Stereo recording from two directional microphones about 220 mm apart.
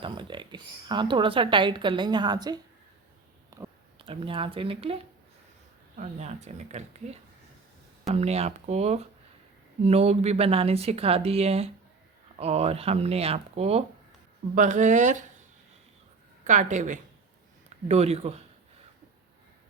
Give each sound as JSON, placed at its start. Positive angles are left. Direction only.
{"t": 0.0, "sound": "a woman's voice", "side_deg": -20}
{"t": 3.5, "sound": "a sound", "side_deg": -15}
{"t": 3.9, "sound": "speech", "side_deg": -25}
{"t": 6.0, "sound": "speech", "side_deg": -30}
{"t": 16.4, "sound": "speech", "side_deg": -35}